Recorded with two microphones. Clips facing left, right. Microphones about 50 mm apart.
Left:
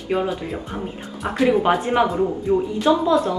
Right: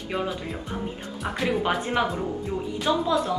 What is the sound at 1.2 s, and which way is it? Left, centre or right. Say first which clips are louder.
Speech: left 8 dB; centre.